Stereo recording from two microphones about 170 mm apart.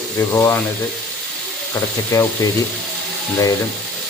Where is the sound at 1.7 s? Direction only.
15° left (ahead or behind).